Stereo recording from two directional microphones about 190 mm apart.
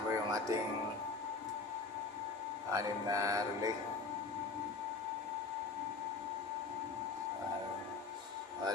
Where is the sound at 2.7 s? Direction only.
15° right (ahead or behind).